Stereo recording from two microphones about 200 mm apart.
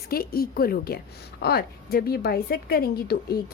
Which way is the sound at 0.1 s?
50° left (ahead or behind).